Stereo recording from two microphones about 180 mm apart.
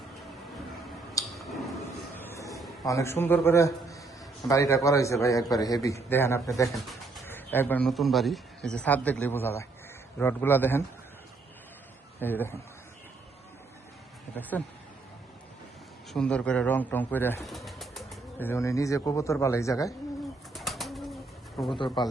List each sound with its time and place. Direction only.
1.3 s a sound: centre (ahead or behind)
2.1 s a sound: 15° left (ahead or behind)
2.8 s a man's voice: 15° left (ahead or behind)
12.2 s a man's voice: 10° left (ahead or behind)
14.5 s a man's voice: 10° left (ahead or behind)
16.1 s a man's voice: 5° left (ahead or behind)
17.4 s bird flight: centre (ahead or behind)
18.3 s a man's voice: 15° left (ahead or behind)
20.5 s bird: centre (ahead or behind)
21.7 s speech: 25° left (ahead or behind)